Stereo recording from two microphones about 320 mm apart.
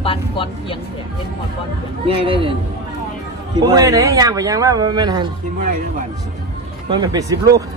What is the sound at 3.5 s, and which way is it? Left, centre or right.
Speech, centre.